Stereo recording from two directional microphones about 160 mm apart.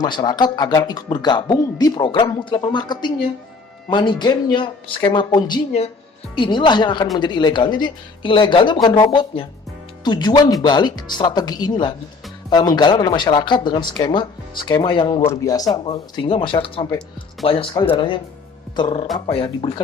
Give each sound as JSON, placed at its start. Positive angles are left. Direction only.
{"t": 0.0, "sound": "speech", "side_deg": 25}
{"t": 15.3, "sound": "speech", "side_deg": 20}